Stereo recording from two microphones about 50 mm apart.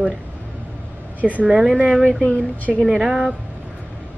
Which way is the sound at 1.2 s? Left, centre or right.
Right.